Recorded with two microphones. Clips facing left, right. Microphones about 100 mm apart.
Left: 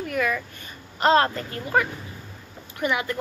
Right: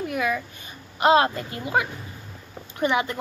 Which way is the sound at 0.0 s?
15° right (ahead or behind).